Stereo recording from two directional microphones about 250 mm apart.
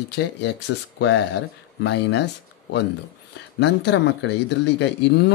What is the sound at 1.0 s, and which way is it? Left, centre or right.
Speech, left.